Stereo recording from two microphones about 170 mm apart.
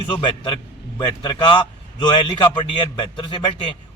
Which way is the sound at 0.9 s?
25° left (ahead or behind).